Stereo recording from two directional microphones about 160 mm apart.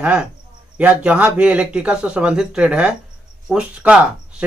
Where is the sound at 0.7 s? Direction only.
10° right (ahead or behind).